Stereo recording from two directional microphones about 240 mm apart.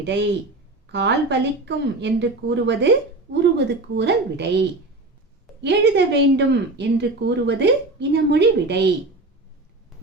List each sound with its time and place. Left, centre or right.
0.0 s speech: right
5.6 s speech: right